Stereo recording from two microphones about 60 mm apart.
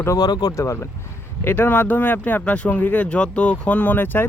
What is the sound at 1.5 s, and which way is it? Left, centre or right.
Speech, left.